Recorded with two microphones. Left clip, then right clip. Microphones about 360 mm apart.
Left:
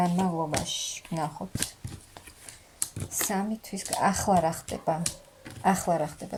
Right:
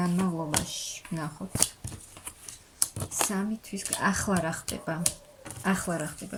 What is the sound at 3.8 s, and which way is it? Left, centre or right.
Speech, centre.